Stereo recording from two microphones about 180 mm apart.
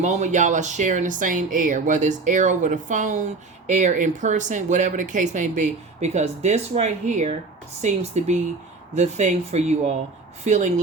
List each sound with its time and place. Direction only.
0.0 s speech: 40° right (ahead or behind)